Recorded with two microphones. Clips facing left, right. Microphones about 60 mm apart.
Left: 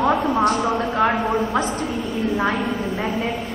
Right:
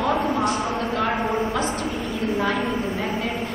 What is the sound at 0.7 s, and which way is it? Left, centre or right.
Speech, left.